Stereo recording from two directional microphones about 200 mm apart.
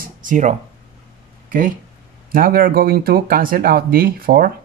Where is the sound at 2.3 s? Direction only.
45° right (ahead or behind).